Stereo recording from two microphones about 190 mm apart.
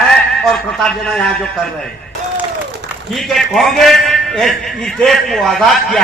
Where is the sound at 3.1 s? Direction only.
Centre (ahead or behind).